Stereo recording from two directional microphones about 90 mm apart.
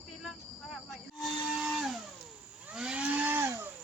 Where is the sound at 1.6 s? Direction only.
5° right (ahead or behind); by 3.6 s 25° right (ahead or behind).